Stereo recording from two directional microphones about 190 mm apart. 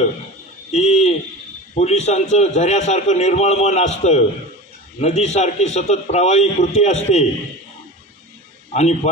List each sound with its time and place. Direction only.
0.7 s hoot: 35° left (ahead or behind)
1.8 s a man's voice: 35° left (ahead or behind)
8.7 s a man's voice: 35° left (ahead or behind)